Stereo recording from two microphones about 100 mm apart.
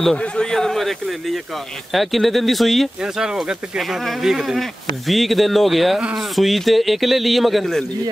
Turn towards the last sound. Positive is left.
turn(degrees=0)  # may be behind; listen again after turning